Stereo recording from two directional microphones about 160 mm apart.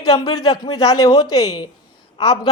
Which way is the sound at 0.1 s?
25° left (ahead or behind).